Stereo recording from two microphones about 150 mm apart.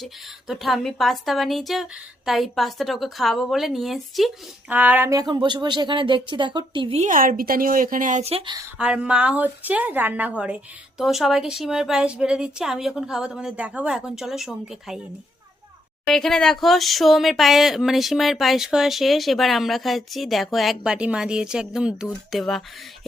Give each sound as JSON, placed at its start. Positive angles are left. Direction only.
{"t": 0.0, "sound": "a woman's voice", "side_deg": 0}
{"t": 4.7, "sound": "speech", "side_deg": -10}
{"t": 5.3, "sound": "speech", "side_deg": -30}
{"t": 7.0, "sound": "speech", "side_deg": -65}
{"t": 8.3, "sound": "speech", "side_deg": -40}
{"t": 8.8, "sound": "a woman's voice", "side_deg": -5}
{"t": 16.0, "sound": "a woman's voice", "side_deg": 0}